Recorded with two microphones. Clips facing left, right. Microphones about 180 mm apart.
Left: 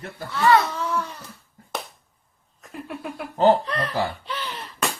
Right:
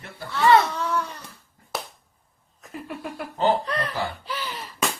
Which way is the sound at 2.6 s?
Centre (ahead or behind).